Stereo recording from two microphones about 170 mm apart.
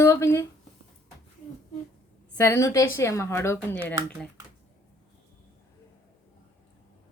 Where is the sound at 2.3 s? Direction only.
15° left (ahead or behind).